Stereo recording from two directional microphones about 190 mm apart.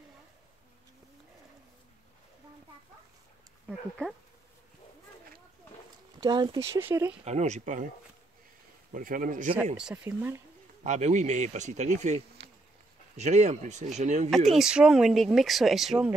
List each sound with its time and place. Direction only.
6.2 s speech: 25° right (ahead or behind)
6.7 s speech: 15° right (ahead or behind)
7.2 s speech: 35° right (ahead or behind)
8.9 s a man's voice: 45° right (ahead or behind)
9.8 s speech: 5° right (ahead or behind)
10.8 s speech: 40° right (ahead or behind)
14.5 s speech: 5° right (ahead or behind)